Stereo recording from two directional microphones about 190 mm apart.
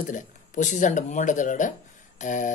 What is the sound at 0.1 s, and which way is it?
Speech, 40° left (ahead or behind).